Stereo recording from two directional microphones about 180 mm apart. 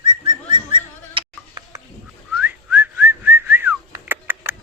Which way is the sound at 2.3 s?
10° right (ahead or behind).